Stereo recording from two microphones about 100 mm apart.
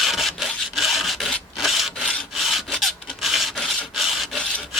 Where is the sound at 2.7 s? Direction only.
Centre (ahead or behind).